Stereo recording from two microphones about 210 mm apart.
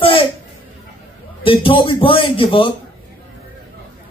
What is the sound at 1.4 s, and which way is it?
A man's voice, 25° left (ahead or behind).